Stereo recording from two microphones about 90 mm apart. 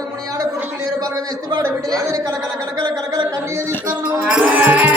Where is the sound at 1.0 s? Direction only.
45° right (ahead or behind).